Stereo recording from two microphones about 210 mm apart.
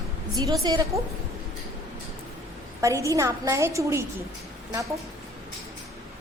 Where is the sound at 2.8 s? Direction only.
15° right (ahead or behind).